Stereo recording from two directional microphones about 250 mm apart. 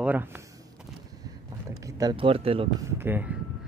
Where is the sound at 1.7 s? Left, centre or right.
Centre.